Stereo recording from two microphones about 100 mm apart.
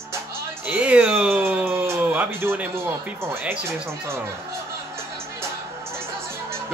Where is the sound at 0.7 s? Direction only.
10° right (ahead or behind).